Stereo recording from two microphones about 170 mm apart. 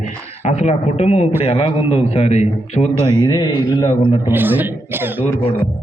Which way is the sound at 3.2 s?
25° left (ahead or behind).